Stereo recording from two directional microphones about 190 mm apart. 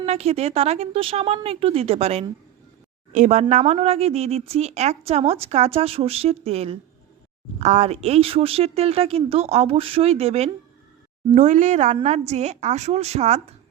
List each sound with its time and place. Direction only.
0.0 s a woman's voice: 35° right (ahead or behind)